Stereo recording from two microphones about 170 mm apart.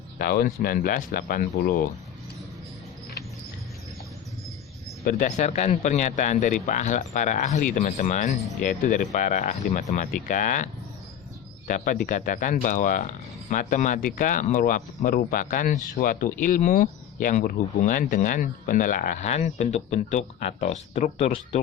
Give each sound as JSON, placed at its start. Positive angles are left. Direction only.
{"t": 0.2, "sound": "speech", "side_deg": 60}
{"t": 5.0, "sound": "speech", "side_deg": 50}
{"t": 11.7, "sound": "speech", "side_deg": 50}